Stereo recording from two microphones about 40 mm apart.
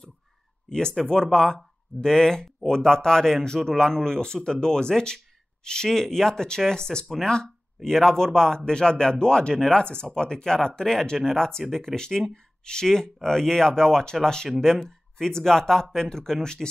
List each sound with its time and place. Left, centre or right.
0.7 s speech: centre